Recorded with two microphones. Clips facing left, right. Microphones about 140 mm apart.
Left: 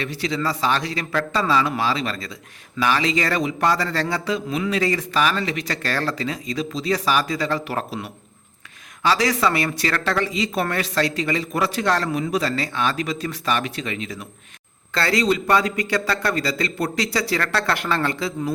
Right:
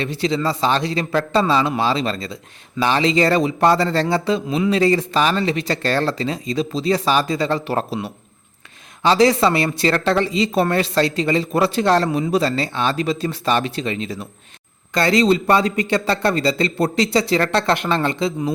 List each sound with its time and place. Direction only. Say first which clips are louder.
0.0 s a man's voice: right 4 dB; 25° right (ahead or behind)